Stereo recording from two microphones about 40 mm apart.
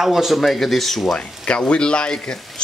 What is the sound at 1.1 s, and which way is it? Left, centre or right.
Speech, left.